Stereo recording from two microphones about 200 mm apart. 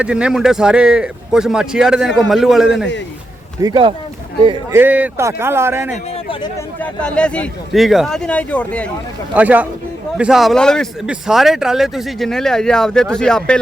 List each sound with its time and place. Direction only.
0.0 s speech: 5° right (ahead or behind)
3.6 s speech: 20° right (ahead or behind)
4.7 s a man's voice: 10° right (ahead or behind)
7.0 s speech: 5° left (ahead or behind)
9.3 s a man's voice: 10° right (ahead or behind)